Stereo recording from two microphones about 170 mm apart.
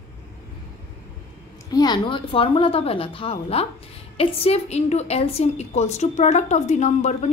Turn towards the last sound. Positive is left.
turn(degrees=45)  # may be behind; listen again after turning